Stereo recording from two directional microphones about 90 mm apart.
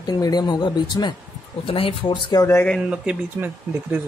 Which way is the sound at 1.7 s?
85° left.